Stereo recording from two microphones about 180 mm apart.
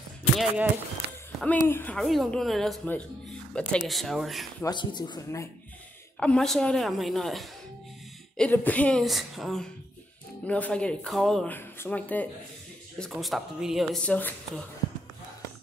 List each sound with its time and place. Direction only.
0.4 s speech: 10° right (ahead or behind)
1.6 s speech: 10° left (ahead or behind)
4.6 s speech: 25° left (ahead or behind)
6.1 s speech: 5° left (ahead or behind)